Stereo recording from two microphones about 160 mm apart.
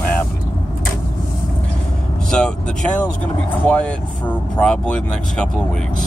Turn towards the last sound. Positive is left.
turn(degrees=5)  # may be behind; listen again after turning